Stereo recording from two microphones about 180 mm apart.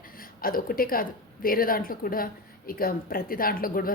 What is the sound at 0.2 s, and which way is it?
A woman's voice, 55° left (ahead or behind).